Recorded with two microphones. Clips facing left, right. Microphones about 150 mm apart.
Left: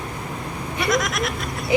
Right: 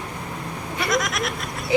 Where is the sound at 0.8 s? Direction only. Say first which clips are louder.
Left 2 dB; centre (ahead or behind).